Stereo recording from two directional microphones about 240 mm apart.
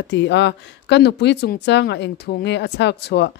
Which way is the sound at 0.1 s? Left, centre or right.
Left.